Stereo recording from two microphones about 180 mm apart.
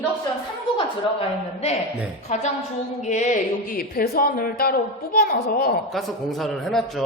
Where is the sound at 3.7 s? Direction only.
55° left (ahead or behind).